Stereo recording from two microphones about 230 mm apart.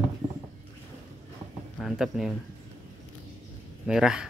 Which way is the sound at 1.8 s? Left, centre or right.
Centre.